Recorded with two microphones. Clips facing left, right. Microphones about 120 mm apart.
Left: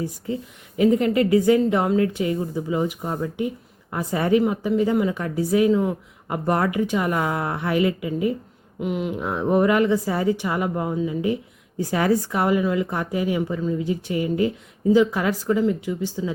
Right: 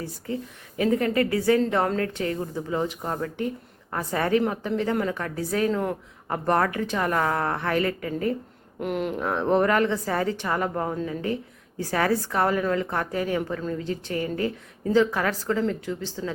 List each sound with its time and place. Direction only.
0.3 s speech: 20° left (ahead or behind)
5.8 s speech: 5° left (ahead or behind)
6.3 s speech: 15° left (ahead or behind)
8.8 s speech: centre (ahead or behind)